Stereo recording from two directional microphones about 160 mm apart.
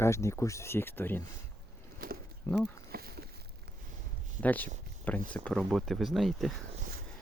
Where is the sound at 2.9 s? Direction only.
70° right (ahead or behind).